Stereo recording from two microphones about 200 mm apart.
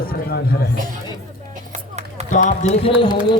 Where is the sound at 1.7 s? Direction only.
35° right (ahead or behind).